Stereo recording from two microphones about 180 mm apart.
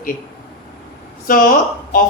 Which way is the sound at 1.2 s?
50° left (ahead or behind).